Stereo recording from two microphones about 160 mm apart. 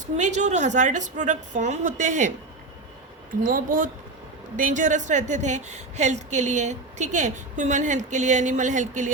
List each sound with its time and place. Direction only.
0.2 s a woman's voice: 45° right (ahead or behind)
3.4 s a woman's voice: 55° right (ahead or behind)